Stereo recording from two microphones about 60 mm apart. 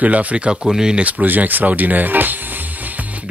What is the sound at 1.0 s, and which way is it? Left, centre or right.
Speech, right.